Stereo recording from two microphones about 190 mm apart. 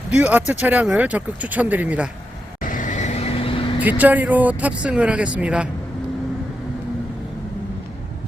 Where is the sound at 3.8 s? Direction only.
10° right (ahead or behind).